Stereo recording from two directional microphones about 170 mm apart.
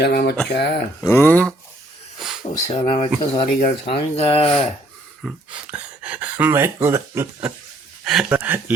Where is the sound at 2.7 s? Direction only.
40° left (ahead or behind).